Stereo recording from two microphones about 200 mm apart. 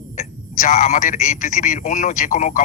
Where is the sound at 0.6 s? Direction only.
45° left (ahead or behind).